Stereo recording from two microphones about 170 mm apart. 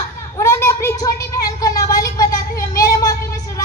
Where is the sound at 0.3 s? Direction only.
15° left (ahead or behind).